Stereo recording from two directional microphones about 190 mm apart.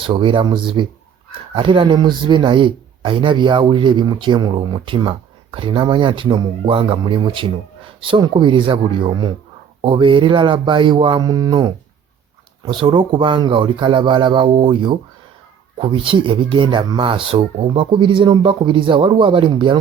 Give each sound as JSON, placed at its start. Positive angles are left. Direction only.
{"t": 0.0, "sound": "speech", "side_deg": -25}